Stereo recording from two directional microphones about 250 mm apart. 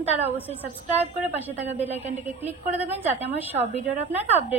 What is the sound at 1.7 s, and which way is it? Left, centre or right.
Speech, centre.